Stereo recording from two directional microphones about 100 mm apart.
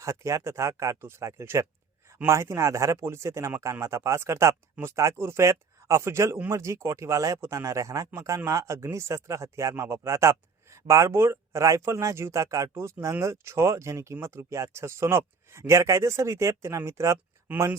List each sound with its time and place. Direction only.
0.0 s speech: 30° right (ahead or behind)